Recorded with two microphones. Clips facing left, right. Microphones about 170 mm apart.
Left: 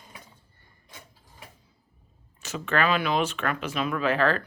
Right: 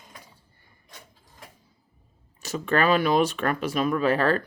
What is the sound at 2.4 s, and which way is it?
Speech, 35° right (ahead or behind).